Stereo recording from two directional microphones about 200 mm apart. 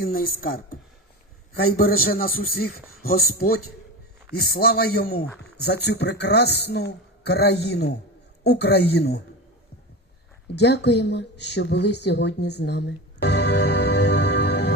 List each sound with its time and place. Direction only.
0.0 s a man's voice: 45° left (ahead or behind)
10.5 s speech: 55° left (ahead or behind)